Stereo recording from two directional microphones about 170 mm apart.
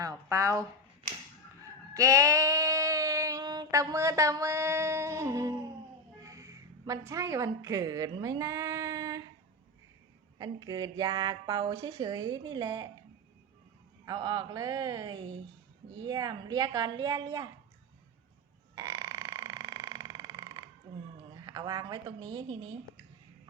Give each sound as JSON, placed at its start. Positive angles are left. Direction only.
{"t": 0.0, "sound": "speech", "side_deg": -20}
{"t": 1.9, "sound": "female singing", "side_deg": -20}
{"t": 6.2, "sound": "a woman's voice", "side_deg": -20}
{"t": 10.3, "sound": "a woman's voice", "side_deg": -20}
{"t": 14.0, "sound": "a woman's voice", "side_deg": -25}
{"t": 18.7, "sound": "burping", "side_deg": -20}
{"t": 21.3, "sound": "a woman's voice", "side_deg": -20}